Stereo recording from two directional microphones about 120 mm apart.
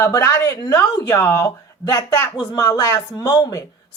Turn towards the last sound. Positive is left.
turn(degrees=30)  # may be behind; listen again after turning